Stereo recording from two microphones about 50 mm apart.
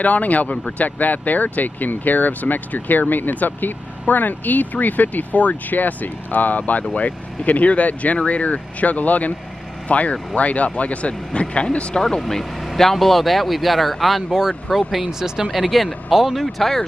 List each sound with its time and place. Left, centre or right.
0.0 s speech: left; by 16.8 s centre